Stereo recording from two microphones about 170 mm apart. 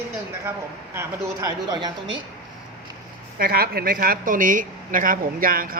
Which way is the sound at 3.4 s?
60° right (ahead or behind).